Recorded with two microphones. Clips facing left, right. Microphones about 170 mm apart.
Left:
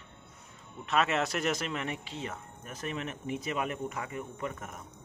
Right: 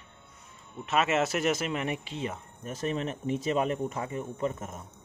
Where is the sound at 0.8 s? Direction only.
5° right (ahead or behind).